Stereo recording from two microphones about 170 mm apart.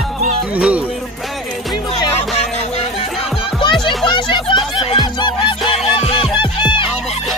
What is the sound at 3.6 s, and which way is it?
Music, 25° left (ahead or behind).